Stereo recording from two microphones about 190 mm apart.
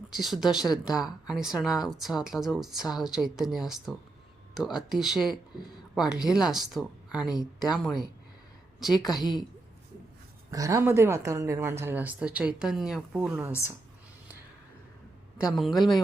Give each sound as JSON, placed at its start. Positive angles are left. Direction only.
{"t": 0.1, "sound": "a woman's voice", "side_deg": 0}
{"t": 7.3, "sound": "speech", "side_deg": 20}
{"t": 9.0, "sound": "speech", "side_deg": 20}
{"t": 10.5, "sound": "speech", "side_deg": -15}
{"t": 15.4, "sound": "speech", "side_deg": 0}